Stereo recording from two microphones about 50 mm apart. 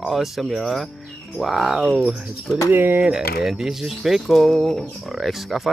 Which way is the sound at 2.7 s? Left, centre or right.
Right.